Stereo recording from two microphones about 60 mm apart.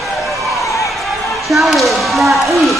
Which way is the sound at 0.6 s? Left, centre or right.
Left.